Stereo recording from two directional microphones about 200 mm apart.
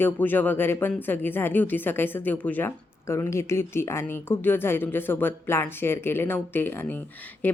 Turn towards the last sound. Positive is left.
turn(degrees=10)  # may be behind; listen again after turning